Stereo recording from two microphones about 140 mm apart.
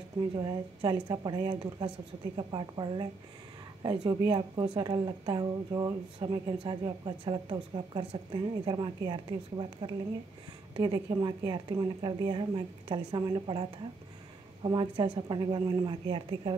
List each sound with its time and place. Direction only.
0.4 s a woman's voice: 35° right (ahead or behind)